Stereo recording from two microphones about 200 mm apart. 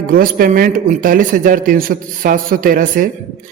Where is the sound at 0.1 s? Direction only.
45° right (ahead or behind).